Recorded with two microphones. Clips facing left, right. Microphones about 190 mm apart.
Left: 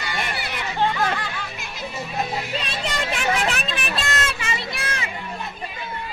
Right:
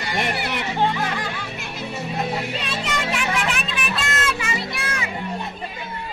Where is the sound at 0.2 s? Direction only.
65° right (ahead or behind).